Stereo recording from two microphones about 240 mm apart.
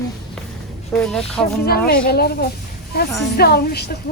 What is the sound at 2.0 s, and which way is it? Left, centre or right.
A woman's voice, left.